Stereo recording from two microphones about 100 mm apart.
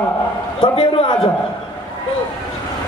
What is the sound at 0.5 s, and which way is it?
Speech, 70° left (ahead or behind).